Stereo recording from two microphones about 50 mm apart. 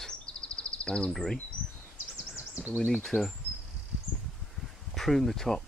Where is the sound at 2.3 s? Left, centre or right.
Right.